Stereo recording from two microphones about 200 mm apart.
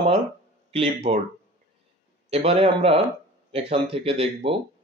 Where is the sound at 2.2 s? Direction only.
30° right (ahead or behind).